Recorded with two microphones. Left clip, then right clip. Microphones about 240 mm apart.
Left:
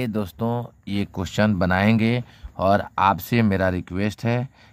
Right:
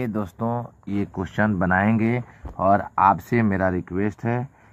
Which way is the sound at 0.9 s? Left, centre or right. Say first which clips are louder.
Left 1 dB; left.